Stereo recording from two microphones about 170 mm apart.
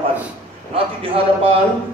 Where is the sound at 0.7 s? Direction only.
35° right (ahead or behind).